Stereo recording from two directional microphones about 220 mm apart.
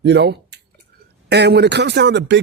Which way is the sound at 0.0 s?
50° right (ahead or behind).